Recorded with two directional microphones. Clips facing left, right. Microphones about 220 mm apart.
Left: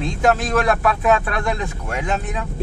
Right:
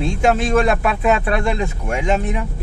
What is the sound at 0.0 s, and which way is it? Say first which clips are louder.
Speech: right 2 dB; 25° right (ahead or behind).